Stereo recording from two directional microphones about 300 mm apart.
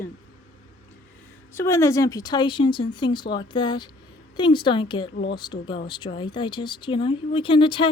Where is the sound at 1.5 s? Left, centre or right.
Centre.